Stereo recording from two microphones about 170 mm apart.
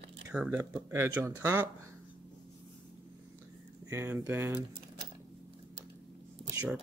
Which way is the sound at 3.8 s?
15° right (ahead or behind).